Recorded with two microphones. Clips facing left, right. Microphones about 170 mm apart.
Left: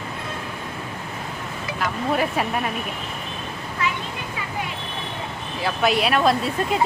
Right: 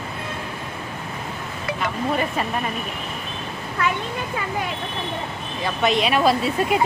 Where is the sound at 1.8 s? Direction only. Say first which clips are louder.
Left 1 dB; 5° left (ahead or behind).